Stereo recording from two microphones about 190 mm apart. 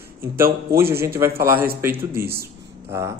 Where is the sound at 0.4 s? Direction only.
15° right (ahead or behind).